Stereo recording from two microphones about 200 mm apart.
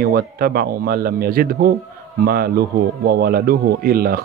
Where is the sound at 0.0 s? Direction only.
50° right (ahead or behind).